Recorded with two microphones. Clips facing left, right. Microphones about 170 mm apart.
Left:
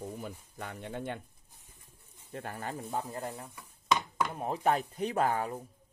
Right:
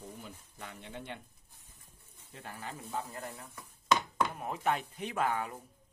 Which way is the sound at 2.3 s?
50° left (ahead or behind).